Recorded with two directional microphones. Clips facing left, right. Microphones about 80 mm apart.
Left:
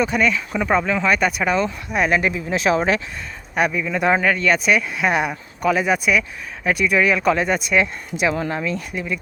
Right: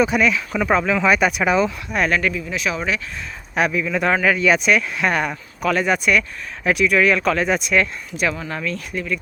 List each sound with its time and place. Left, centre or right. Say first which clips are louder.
0.0 s speech: right 2 dB; centre
1.9 s speech: left 1 dB; centre
2.5 s speech: left 5 dB; left
3.5 s speech: even; centre